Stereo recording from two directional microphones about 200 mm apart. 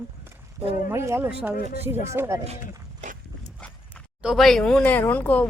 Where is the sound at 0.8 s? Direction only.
15° right (ahead or behind).